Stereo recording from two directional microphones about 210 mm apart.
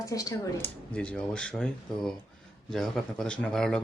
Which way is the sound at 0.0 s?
15° left (ahead or behind).